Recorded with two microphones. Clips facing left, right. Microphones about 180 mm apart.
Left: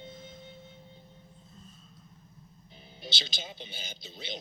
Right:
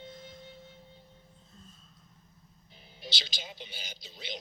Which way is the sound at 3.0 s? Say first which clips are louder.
Left 2 dB; 25° left (ahead or behind).